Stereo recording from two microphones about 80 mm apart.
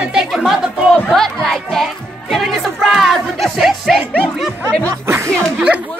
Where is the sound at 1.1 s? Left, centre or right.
Centre.